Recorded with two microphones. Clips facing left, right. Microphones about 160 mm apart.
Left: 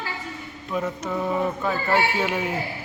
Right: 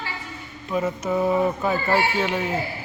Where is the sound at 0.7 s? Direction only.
5° right (ahead or behind).